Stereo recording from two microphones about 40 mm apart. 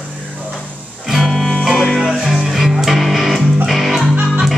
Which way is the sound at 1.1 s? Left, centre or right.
Centre.